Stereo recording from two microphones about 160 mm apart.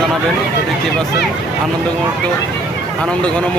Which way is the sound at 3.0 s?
5° left (ahead or behind).